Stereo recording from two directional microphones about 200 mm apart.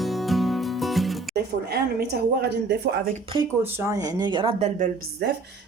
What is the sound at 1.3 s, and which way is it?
A woman's voice, 55° right (ahead or behind).